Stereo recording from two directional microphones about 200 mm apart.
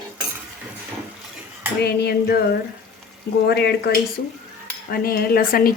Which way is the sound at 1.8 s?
55° left (ahead or behind).